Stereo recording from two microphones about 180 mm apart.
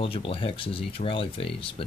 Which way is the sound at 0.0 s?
30° left (ahead or behind).